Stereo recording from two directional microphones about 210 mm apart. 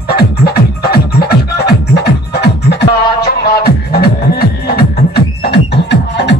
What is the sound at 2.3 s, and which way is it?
Beatboxing, 50° left (ahead or behind).